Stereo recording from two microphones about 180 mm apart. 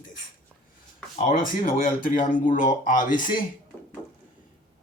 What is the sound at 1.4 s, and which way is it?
Speech, 50° left (ahead or behind).